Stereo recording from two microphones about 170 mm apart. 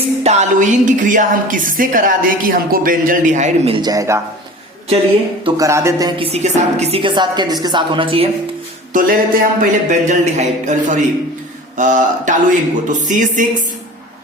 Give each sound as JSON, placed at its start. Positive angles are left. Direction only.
{"t": 0.2, "sound": "a woman's voice", "side_deg": -40}
{"t": 3.8, "sound": "speech", "side_deg": -20}
{"t": 5.5, "sound": "speech", "side_deg": -15}
{"t": 6.3, "sound": "a woman's voice", "side_deg": -40}
{"t": 8.9, "sound": "music", "side_deg": -50}
{"t": 9.6, "sound": "a woman's voice", "side_deg": -45}